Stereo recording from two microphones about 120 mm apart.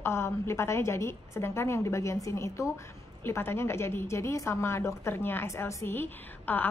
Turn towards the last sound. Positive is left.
turn(degrees=15)  # may be behind; listen again after turning